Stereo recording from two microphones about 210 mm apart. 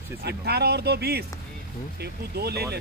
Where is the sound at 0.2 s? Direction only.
50° right (ahead or behind).